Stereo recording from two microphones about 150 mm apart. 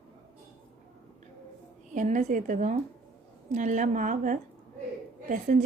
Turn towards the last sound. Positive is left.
turn(degrees=-60)  # may be behind; listen again after turning